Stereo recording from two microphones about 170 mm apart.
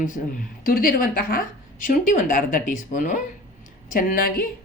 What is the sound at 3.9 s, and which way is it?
Speech, 60° left (ahead or behind).